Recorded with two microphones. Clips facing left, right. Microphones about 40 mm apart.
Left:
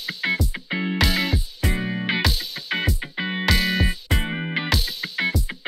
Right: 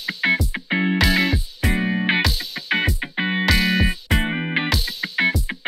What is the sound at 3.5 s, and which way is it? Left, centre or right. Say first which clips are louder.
Music: right 1 dB; centre.